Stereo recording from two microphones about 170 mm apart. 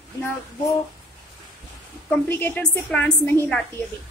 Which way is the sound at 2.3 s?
10° left (ahead or behind).